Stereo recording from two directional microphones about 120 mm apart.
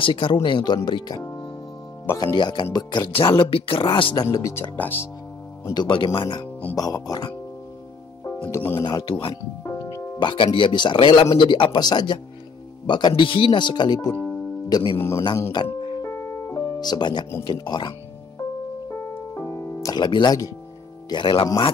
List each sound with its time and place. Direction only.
0.0 s speech: 45° left (ahead or behind); by 5.0 s 15° left (ahead or behind)
5.7 s speech: 40° left (ahead or behind)
8.5 s speech: 20° left (ahead or behind)
8.8 s speech: 40° left (ahead or behind)
9.6 s music: 25° left (ahead or behind)
10.2 s speech: 45° left (ahead or behind)
14.1 s music: 15° left (ahead or behind)
14.7 s speech: 35° left (ahead or behind)
15.0 s speech: 25° left (ahead or behind)
15.5 s music: 40° left (ahead or behind)
16.0 s music: 25° left (ahead or behind)
17.5 s speech: 35° left (ahead or behind)
18.9 s music: 20° left (ahead or behind)
21.1 s speech: 45° left (ahead or behind)